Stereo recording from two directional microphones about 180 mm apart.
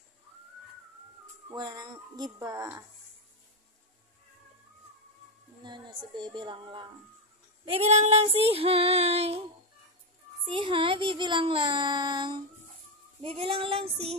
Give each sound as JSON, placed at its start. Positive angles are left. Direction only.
{"t": 1.5, "sound": "speech", "side_deg": -20}
{"t": 5.6, "sound": "speech", "side_deg": -25}
{"t": 7.6, "sound": "child singing", "side_deg": -35}
{"t": 10.4, "sound": "speech", "side_deg": -30}
{"t": 13.2, "sound": "child singing", "side_deg": -30}